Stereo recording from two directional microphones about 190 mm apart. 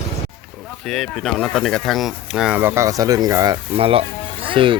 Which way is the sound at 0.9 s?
Centre (ahead or behind).